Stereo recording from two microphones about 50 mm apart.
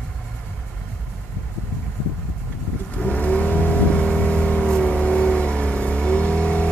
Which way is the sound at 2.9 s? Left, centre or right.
Left.